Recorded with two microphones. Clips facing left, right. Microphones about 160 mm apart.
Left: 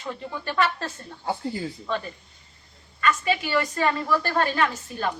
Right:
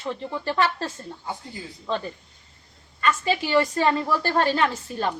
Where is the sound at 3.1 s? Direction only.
30° right (ahead or behind).